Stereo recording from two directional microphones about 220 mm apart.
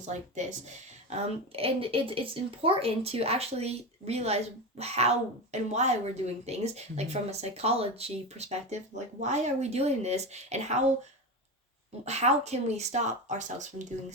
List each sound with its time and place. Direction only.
0.0 s a woman's voice: 30° right (ahead or behind)
12.0 s speech: 30° right (ahead or behind)